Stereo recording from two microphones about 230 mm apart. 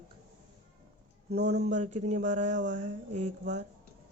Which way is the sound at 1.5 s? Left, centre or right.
Right.